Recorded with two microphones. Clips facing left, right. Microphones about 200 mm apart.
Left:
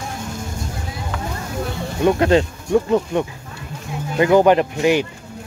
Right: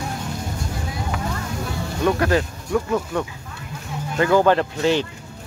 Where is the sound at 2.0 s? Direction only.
20° left (ahead or behind).